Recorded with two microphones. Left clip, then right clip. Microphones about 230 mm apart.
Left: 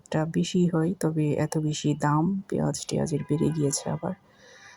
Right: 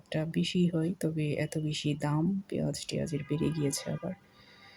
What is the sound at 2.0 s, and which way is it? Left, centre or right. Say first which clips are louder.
Speech: left 10 dB; centre.